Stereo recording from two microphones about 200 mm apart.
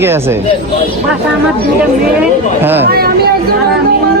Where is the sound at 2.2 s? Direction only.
10° right (ahead or behind).